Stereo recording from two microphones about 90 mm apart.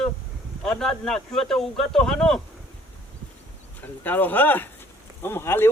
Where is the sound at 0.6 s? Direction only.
5° left (ahead or behind).